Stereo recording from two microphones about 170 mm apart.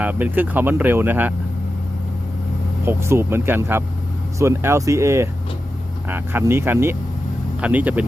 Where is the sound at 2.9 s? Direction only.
15° right (ahead or behind).